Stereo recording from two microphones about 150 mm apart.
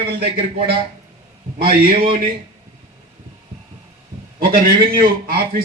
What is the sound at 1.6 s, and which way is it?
Speech, 80° right.